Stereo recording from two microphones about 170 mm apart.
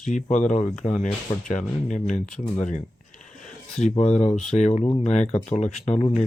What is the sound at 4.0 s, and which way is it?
Speech, 40° left (ahead or behind).